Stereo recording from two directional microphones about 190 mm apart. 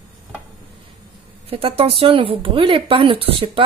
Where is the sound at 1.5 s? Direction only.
30° right (ahead or behind).